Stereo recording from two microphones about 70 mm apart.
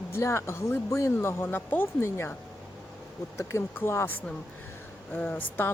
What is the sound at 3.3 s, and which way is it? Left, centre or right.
Speech, left.